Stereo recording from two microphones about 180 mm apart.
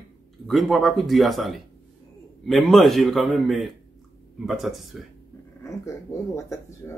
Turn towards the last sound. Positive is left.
turn(degrees=15)  # may be behind; listen again after turning